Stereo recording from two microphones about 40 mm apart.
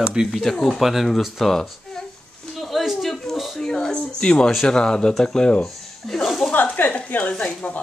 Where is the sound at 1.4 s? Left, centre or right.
Centre.